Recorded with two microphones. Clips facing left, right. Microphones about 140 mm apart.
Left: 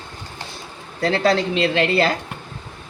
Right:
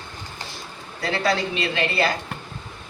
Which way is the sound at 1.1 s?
90° left.